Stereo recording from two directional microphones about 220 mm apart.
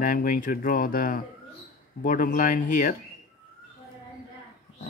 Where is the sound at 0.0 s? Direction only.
40° left (ahead or behind).